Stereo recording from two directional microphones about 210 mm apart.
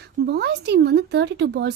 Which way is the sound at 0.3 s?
50° right (ahead or behind).